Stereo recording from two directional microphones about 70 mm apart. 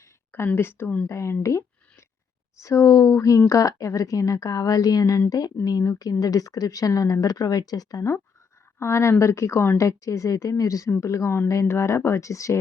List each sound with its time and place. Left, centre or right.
0.3 s speech: left
8.8 s speech: left